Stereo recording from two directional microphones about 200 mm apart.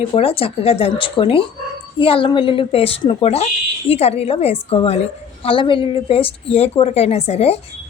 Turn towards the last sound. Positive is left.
turn(degrees=30)  # may be behind; listen again after turning